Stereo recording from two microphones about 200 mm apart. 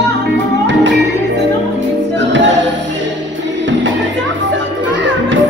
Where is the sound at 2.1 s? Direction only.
60° right (ahead or behind).